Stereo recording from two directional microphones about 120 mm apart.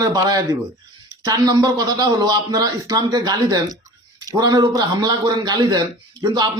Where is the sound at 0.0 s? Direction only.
35° right (ahead or behind).